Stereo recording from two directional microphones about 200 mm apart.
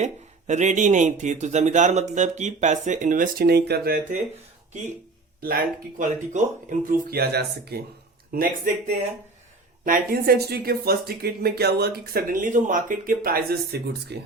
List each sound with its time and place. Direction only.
0.0 s speech: 35° right (ahead or behind)
5.4 s speech: 45° right (ahead or behind)
9.8 s speech: 45° right (ahead or behind)